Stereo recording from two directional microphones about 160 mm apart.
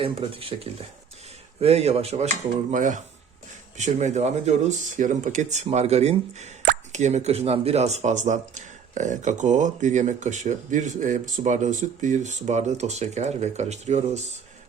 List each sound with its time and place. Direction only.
0.0 s speech: 35° right (ahead or behind)